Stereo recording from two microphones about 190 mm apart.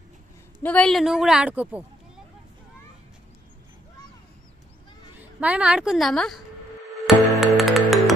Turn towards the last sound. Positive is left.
turn(degrees=0)  # may be behind; listen again after turning